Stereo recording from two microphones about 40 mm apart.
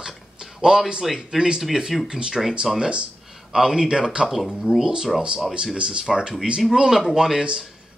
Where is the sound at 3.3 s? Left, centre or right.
Centre.